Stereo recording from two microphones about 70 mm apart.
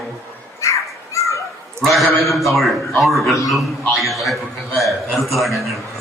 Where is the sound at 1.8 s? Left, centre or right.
Centre.